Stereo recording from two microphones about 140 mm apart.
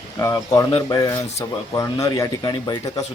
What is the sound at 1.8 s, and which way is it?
Speech, 20° left (ahead or behind).